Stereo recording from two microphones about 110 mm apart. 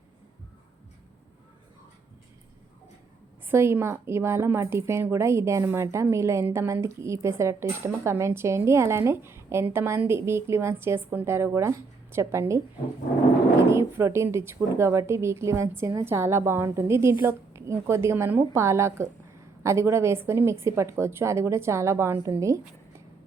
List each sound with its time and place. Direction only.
3.5 s a woman's voice: 20° right (ahead or behind)
13.7 s a woman's voice: 25° right (ahead or behind)